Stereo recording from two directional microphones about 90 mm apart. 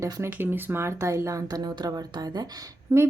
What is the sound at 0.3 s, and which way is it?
Speech, 25° right (ahead or behind).